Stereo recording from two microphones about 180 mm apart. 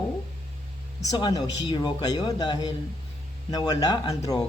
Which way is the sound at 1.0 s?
20° left (ahead or behind).